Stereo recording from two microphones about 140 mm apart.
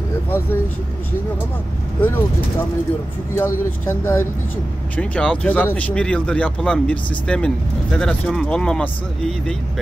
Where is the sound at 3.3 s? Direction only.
15° left (ahead or behind).